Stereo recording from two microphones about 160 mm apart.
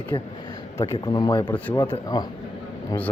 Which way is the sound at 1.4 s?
10° left (ahead or behind).